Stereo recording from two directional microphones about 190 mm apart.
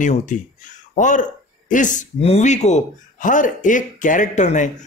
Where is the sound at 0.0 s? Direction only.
40° left (ahead or behind).